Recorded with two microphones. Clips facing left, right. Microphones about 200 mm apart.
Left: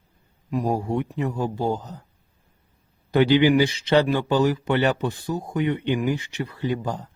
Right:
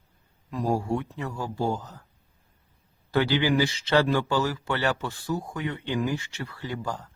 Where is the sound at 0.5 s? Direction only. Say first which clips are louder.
Left 3 dB; 15° left (ahead or behind).